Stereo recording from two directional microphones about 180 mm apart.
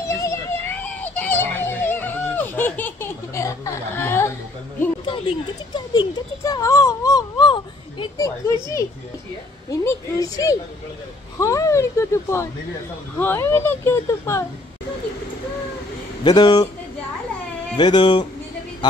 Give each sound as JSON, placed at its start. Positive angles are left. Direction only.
{"t": 0.2, "sound": "a sound", "side_deg": 10}
{"t": 5.7, "sound": "speech", "side_deg": 20}
{"t": 9.7, "sound": "a woman's voice", "side_deg": 20}
{"t": 16.3, "sound": "a woman's voice", "side_deg": 20}
{"t": 17.7, "sound": "a woman's voice", "side_deg": 25}